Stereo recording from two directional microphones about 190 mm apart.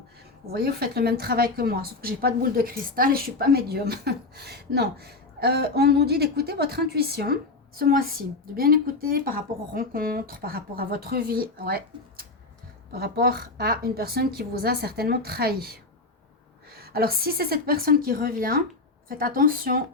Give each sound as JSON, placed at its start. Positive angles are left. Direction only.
{"t": 0.5, "sound": "a woman's voice", "side_deg": -55}